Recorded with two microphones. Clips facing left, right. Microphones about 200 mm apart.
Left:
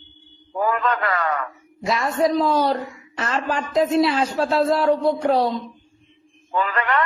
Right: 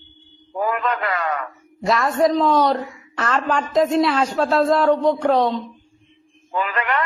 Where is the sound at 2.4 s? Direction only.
30° left (ahead or behind).